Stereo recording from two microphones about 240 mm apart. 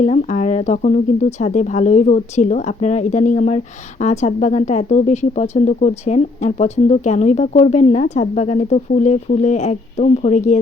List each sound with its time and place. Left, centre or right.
0.0 s speech: left